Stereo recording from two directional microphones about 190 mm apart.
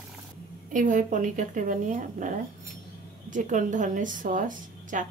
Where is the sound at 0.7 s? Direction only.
40° right (ahead or behind).